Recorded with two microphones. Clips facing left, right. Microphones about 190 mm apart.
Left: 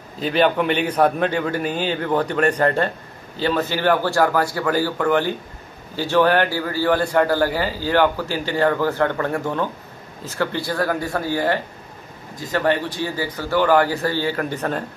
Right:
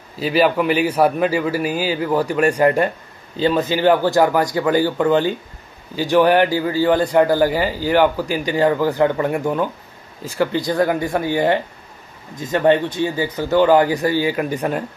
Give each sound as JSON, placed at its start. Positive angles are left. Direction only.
{"t": 0.2, "sound": "a man's voice", "side_deg": -5}